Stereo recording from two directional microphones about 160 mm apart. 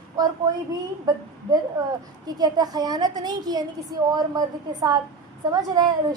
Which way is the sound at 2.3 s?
25° right (ahead or behind).